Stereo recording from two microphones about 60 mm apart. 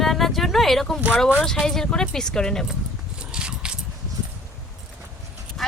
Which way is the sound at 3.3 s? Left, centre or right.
Centre.